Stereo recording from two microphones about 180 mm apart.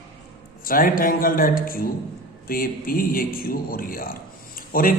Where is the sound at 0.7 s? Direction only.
50° left (ahead or behind).